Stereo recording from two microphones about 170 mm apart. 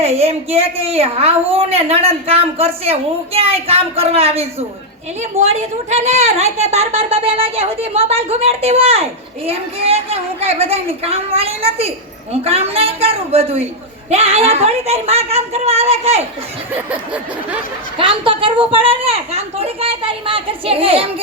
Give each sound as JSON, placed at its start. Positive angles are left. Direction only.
{"t": 0.0, "sound": "a woman's voice", "side_deg": -40}
{"t": 16.7, "sound": "snicker", "side_deg": -10}
{"t": 17.9, "sound": "a woman's voice", "side_deg": -30}